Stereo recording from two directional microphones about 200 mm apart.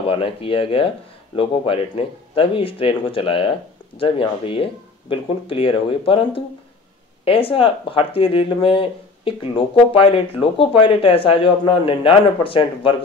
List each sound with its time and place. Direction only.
0.1 s a man's voice: 25° left (ahead or behind)